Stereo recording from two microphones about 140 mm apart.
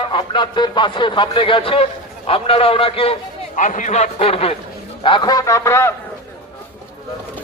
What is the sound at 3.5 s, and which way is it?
A man's voice, 65° left (ahead or behind).